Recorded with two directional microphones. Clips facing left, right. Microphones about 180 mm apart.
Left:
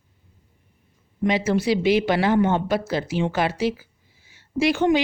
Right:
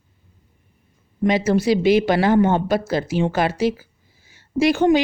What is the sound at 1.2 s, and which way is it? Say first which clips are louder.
Speech: right 3 dB; 40° right (ahead or behind).